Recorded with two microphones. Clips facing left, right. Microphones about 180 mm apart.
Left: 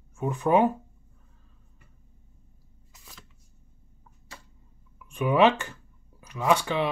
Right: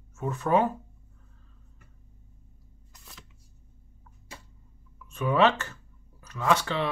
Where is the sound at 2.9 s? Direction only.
Centre (ahead or behind).